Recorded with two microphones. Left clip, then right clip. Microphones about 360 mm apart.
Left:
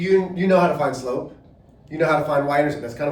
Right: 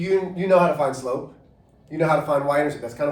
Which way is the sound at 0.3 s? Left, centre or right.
Centre.